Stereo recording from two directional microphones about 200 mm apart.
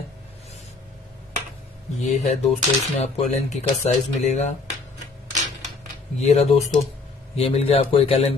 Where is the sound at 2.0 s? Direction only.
35° left (ahead or behind).